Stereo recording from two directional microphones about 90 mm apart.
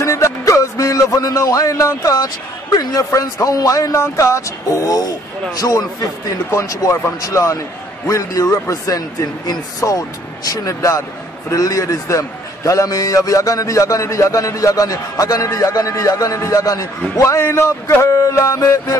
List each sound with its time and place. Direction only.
0.0 s music: 35° left (ahead or behind)
2.7 s a man's voice: 40° left (ahead or behind)